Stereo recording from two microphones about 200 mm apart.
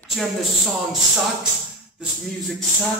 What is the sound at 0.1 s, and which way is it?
Speech, centre (ahead or behind).